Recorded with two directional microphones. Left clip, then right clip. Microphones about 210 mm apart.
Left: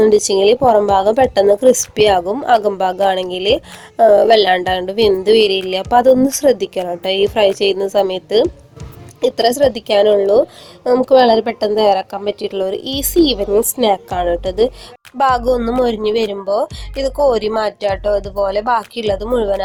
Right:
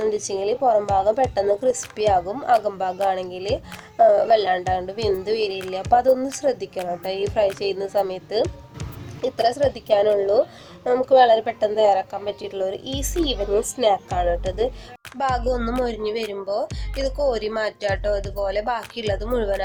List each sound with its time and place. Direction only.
0.0 s a woman's voice: 35° left (ahead or behind)